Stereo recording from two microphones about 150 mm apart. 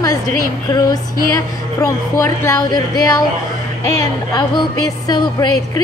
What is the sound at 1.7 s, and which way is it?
A woman's voice, 20° left (ahead or behind).